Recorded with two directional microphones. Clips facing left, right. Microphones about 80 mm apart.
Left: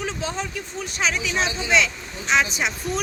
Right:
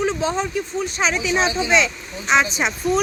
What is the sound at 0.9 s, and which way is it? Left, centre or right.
A woman's voice, right.